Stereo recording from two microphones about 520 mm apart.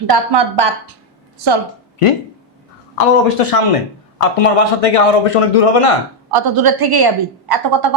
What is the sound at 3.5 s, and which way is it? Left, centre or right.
A man's voice, left.